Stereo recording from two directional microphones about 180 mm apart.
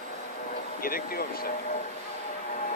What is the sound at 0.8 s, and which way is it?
Speech, 55° left (ahead or behind).